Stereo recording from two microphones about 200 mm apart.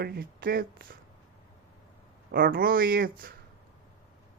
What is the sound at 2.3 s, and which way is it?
Speech, 45° right (ahead or behind).